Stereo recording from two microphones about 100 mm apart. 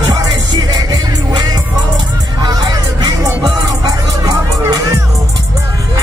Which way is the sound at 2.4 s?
45° right (ahead or behind).